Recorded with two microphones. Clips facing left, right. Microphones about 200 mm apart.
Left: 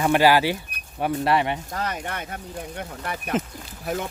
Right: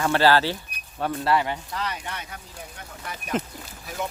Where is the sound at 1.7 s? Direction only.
50° left (ahead or behind).